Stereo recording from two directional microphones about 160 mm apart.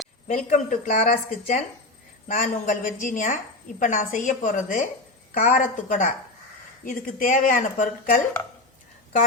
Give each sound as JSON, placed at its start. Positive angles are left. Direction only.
{"t": 0.3, "sound": "a woman's voice", "side_deg": 50}